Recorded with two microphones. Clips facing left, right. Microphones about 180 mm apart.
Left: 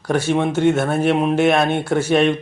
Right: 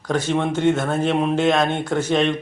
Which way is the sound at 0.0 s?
10° left (ahead or behind).